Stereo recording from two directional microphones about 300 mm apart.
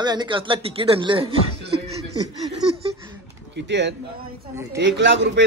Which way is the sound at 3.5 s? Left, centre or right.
Right.